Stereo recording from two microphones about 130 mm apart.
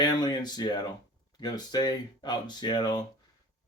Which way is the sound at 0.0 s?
35° left (ahead or behind).